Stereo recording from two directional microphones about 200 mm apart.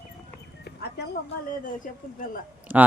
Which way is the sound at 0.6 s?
55° left (ahead or behind).